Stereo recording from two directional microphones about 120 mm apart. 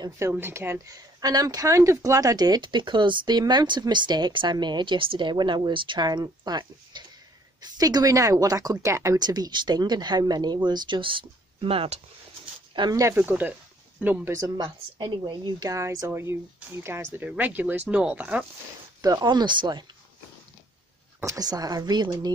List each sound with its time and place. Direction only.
0.2 s speech: 20° right (ahead or behind); by 12.0 s 50° right (ahead or behind)
12.9 s speech: 20° right (ahead or behind)
14.4 s speech: 35° right (ahead or behind); by 18.4 s 10° right (ahead or behind)
18.9 s speech: 35° right (ahead or behind)
21.2 s speech: 30° right (ahead or behind)